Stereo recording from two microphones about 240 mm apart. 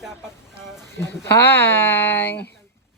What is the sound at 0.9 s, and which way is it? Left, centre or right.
Speech, centre.